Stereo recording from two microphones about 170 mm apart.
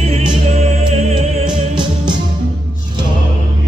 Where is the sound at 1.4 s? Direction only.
25° right (ahead or behind).